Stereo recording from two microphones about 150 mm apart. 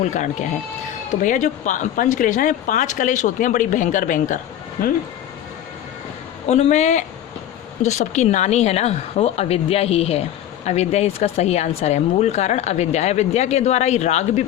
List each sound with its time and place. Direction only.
0.0 s a woman's voice: 55° left (ahead or behind)
6.5 s a woman's voice: 50° left (ahead or behind)